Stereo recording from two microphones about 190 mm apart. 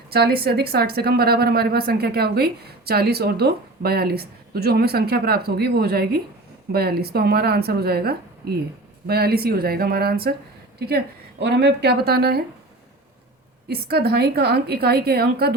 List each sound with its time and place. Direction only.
0.1 s speech: 55° right (ahead or behind)
13.7 s speech: 55° right (ahead or behind)